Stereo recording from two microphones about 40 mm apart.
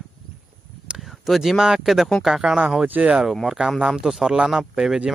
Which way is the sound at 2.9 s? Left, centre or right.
Right.